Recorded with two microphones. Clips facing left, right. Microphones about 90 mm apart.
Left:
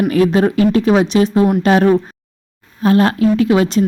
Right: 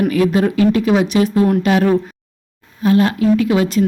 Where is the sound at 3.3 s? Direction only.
30° left (ahead or behind).